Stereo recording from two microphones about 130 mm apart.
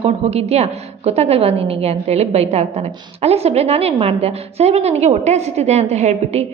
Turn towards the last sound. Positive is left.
turn(degrees=-60)  # may be behind; listen again after turning